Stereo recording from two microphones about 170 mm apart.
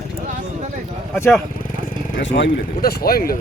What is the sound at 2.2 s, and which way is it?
Speech, 85° left.